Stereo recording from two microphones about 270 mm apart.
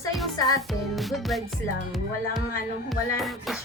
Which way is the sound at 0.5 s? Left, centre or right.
Centre.